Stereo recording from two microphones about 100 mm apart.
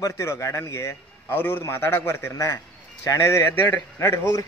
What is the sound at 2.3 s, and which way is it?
A man's voice, 35° left (ahead or behind).